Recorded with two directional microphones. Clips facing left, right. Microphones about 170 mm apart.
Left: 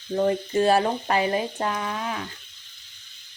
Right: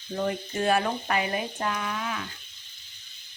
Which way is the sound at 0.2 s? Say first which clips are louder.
Left 7 dB; 30° left (ahead or behind).